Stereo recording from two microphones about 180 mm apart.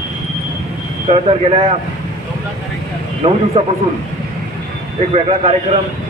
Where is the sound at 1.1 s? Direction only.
30° right (ahead or behind).